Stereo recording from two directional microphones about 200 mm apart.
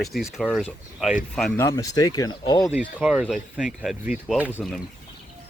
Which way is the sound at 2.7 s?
5° right (ahead or behind).